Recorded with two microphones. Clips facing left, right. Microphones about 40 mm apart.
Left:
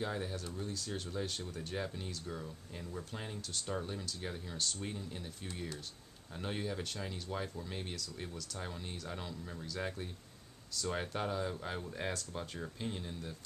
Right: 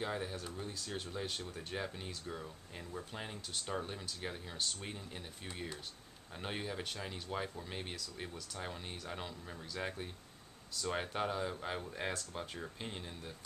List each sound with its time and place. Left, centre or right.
0.0 s speech: centre